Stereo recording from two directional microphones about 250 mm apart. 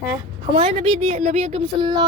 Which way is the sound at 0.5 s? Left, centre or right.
Right.